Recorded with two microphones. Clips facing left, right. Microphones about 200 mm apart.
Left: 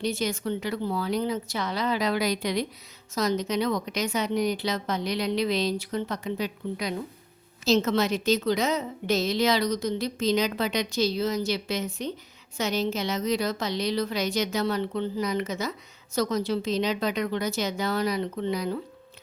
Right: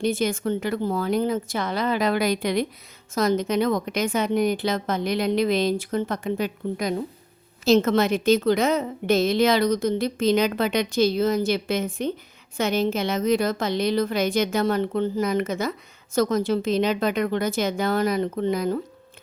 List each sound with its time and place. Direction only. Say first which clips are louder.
0.0 s a woman's voice: right 5 dB; 50° right (ahead or behind)